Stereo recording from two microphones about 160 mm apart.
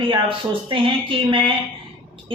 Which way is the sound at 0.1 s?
30° right (ahead or behind).